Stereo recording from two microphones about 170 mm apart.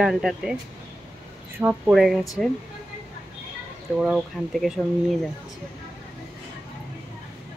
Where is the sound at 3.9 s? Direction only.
Centre (ahead or behind).